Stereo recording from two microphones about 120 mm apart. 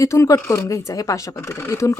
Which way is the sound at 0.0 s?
25° left (ahead or behind).